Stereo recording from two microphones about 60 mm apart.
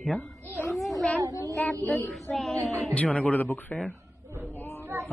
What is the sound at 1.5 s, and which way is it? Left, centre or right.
Speech, left.